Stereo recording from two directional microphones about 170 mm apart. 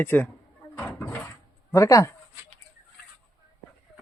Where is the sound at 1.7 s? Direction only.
20° left (ahead or behind).